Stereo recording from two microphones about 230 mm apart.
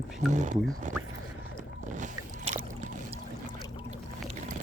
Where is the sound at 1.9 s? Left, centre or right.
Right.